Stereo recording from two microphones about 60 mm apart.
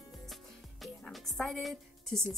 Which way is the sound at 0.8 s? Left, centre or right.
Centre.